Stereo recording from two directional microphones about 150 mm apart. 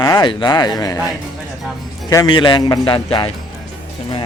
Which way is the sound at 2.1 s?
25° left (ahead or behind).